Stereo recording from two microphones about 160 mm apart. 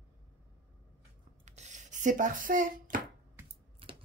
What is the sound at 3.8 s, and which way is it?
Typewriter, 35° right (ahead or behind).